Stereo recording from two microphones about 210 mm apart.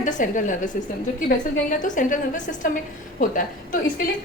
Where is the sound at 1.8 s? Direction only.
40° left (ahead or behind).